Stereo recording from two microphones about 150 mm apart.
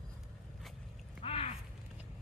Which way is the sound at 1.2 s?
40° left (ahead or behind).